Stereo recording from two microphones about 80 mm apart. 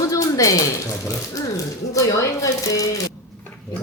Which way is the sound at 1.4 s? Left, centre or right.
Left.